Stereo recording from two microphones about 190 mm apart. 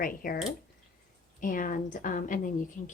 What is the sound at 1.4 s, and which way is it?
Speech, 45° left (ahead or behind).